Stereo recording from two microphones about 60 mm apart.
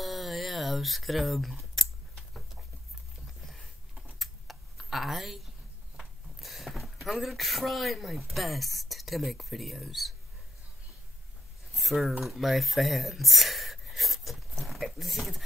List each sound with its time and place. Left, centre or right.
0.0 s a sound: centre
3.4 s typing: centre
6.4 s speech: centre
11.7 s speech: centre